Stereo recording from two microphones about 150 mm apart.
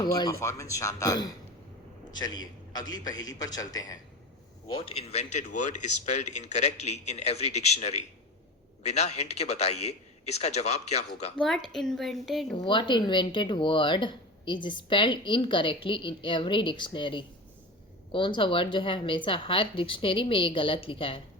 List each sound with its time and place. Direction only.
0.0 s a man's voice: 25° left (ahead or behind)
4.7 s speech: 40° left (ahead or behind)
11.3 s speech: centre (ahead or behind)
12.5 s speech: 30° left (ahead or behind)